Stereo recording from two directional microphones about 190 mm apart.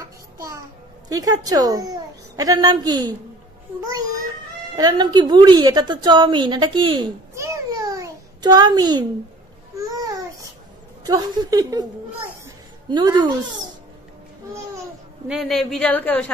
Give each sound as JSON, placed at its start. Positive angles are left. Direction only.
{"t": 0.0, "sound": "music", "side_deg": -15}
{"t": 1.0, "sound": "a woman's voice", "side_deg": -20}
{"t": 4.7, "sound": "a woman's voice", "side_deg": -20}
{"t": 7.3, "sound": "babbling", "side_deg": -20}
{"t": 11.1, "sound": "a woman's voice", "side_deg": -20}
{"t": 12.4, "sound": "a sound", "side_deg": -20}
{"t": 15.2, "sound": "speech", "side_deg": 0}